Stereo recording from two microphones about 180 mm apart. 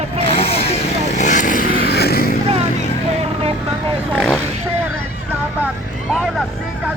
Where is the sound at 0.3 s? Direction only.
35° left (ahead or behind); by 2.3 s 60° left (ahead or behind).